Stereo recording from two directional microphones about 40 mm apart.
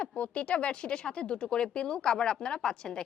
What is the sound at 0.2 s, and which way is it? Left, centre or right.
A woman's voice, left.